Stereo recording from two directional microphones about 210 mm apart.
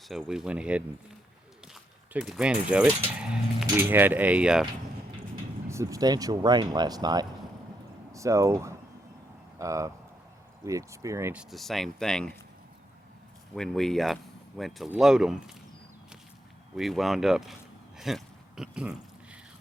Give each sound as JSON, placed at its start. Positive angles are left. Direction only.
{"t": 0.1, "sound": "speech", "side_deg": 0}
{"t": 5.6, "sound": "speech", "side_deg": -15}
{"t": 11.5, "sound": "speech", "side_deg": 0}
{"t": 13.6, "sound": "speech", "side_deg": 0}
{"t": 16.7, "sound": "a sound", "side_deg": 0}